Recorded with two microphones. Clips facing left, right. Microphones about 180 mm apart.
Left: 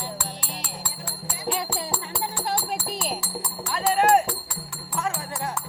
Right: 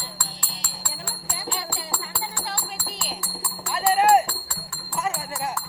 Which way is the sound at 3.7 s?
5° right (ahead or behind).